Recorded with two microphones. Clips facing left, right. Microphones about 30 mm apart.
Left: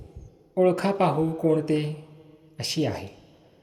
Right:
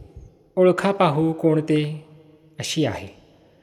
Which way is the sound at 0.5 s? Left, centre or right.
Right.